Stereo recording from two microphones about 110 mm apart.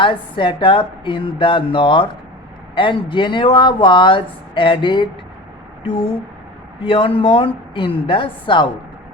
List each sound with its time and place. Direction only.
0.0 s speech: 50° left (ahead or behind)